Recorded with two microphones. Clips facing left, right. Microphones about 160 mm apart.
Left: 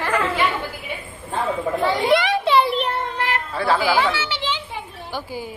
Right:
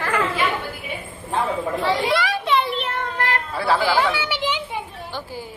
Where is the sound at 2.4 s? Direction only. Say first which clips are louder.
Left 5 dB; 35° left (ahead or behind).